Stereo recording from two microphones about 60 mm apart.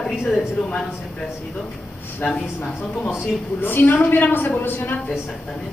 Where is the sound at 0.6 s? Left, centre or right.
Left.